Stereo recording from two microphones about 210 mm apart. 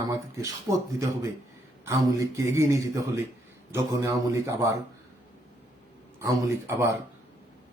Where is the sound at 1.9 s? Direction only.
15° right (ahead or behind).